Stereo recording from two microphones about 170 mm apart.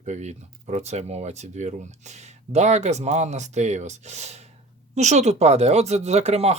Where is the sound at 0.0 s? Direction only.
45° right (ahead or behind).